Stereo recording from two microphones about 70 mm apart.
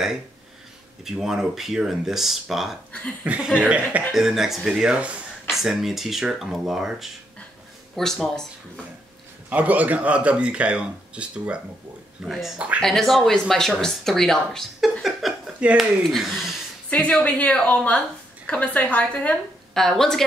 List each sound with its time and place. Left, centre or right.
1.0 s speech: centre
2.9 s a woman's voice: left
3.5 s speech: centre
4.1 s a woman's voice: centre
9.5 s speech: right
12.3 s speech: centre
12.5 s speech: centre
12.8 s speech: centre
15.0 s a sound: centre
15.8 s speech: centre
16.9 s a woman's voice: centre
19.7 s speech: centre